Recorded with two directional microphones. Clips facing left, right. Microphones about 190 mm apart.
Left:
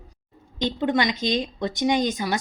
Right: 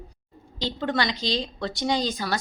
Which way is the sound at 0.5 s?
20° left (ahead or behind).